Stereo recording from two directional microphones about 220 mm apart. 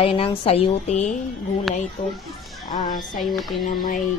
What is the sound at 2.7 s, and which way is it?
Music, 35° left (ahead or behind).